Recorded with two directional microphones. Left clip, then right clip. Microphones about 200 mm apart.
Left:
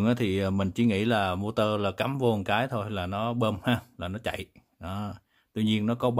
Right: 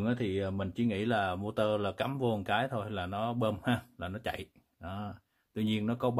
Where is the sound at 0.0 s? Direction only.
40° left (ahead or behind).